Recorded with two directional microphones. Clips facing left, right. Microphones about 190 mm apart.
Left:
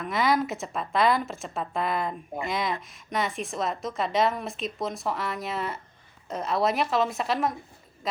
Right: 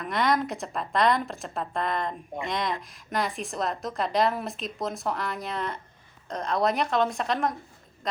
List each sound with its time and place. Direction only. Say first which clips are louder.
0.0 s a woman's voice: left 1 dB; 5° left (ahead or behind)